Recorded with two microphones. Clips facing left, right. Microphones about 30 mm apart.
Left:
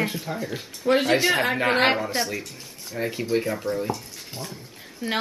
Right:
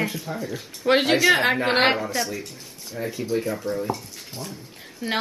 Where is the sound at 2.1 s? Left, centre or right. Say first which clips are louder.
Even; left.